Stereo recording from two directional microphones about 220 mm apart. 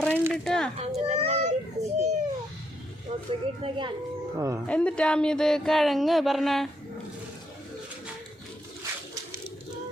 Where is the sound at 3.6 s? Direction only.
20° right (ahead or behind).